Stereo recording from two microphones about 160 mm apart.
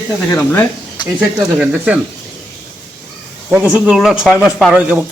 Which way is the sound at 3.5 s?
10° right (ahead or behind).